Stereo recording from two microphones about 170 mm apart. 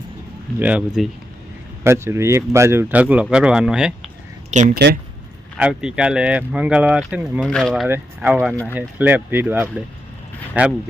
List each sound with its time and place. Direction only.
0.6 s speech: 5° right (ahead or behind)
1.8 s speech: 15° right (ahead or behind)
4.5 s speech: 45° right (ahead or behind)
5.5 s speech: 5° right (ahead or behind)
7.9 s speech: 10° right (ahead or behind)